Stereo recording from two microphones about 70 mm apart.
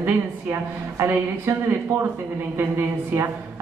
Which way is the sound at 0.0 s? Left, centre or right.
Right.